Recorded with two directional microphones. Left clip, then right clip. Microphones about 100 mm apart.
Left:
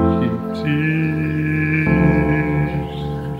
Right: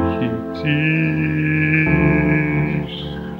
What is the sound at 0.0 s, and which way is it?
Music, centre (ahead or behind).